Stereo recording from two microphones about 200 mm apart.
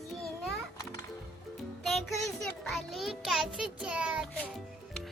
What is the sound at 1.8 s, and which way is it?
Music, centre (ahead or behind).